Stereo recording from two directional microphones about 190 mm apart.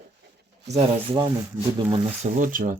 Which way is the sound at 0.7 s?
30° right (ahead or behind).